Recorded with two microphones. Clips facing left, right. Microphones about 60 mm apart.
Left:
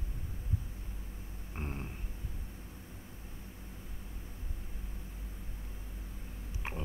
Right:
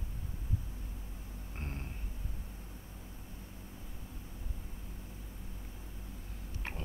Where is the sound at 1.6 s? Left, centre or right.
Centre.